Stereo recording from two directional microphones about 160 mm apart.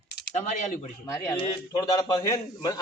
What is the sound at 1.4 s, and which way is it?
Speech, 25° left (ahead or behind).